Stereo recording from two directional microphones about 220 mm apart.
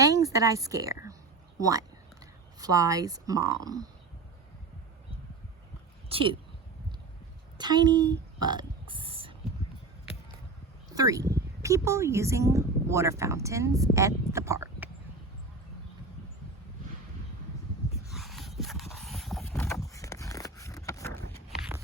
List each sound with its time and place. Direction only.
0.0 s speech: 15° right (ahead or behind)
2.6 s speech: 15° right (ahead or behind)
6.1 s speech: 25° right (ahead or behind)
7.6 s burping: 20° right (ahead or behind)
10.9 s speech: 15° right (ahead or behind)
18.1 s a sound: centre (ahead or behind)
19.7 s a sound: 15° left (ahead or behind)